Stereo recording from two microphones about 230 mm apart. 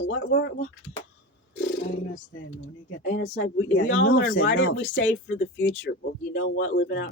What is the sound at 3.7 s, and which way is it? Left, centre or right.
Speech, left.